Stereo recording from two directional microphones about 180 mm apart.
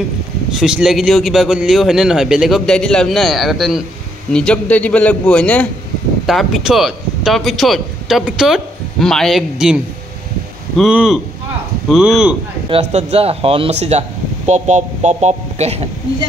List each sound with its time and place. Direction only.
0.5 s a man's voice: 5° right (ahead or behind)
10.8 s a man's voice: 5° right (ahead or behind)
12.6 s speech: 35° right (ahead or behind)